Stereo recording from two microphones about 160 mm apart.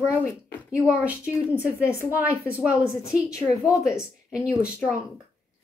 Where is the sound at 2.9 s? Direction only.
20° left (ahead or behind).